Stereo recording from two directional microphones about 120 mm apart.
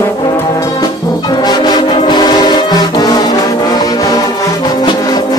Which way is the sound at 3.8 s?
30° left (ahead or behind).